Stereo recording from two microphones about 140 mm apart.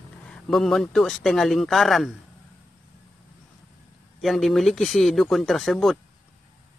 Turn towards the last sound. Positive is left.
turn(degrees=0)  # may be behind; listen again after turning